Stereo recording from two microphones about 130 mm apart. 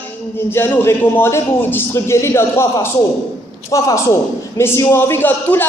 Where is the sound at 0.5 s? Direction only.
15° left (ahead or behind).